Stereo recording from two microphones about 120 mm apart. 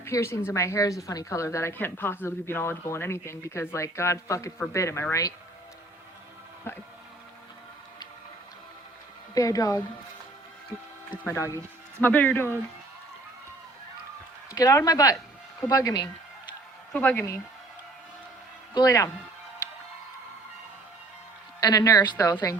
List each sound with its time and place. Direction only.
0.0 s speech: 20° left (ahead or behind)
6.7 s speech: 20° left (ahead or behind)
9.3 s speech: 30° left (ahead or behind)
11.2 s speech: 20° left (ahead or behind)
11.9 s speech: 15° left (ahead or behind)
14.5 s speech: 25° left (ahead or behind)
16.9 s speech: 15° left (ahead or behind)
18.7 s speech: 30° left (ahead or behind)
21.6 s speech: 30° left (ahead or behind)